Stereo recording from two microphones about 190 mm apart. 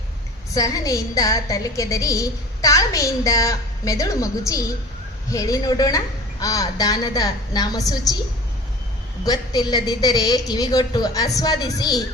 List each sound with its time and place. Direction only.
0.5 s a woman's voice: 20° left (ahead or behind)
9.2 s a woman's voice: 20° left (ahead or behind)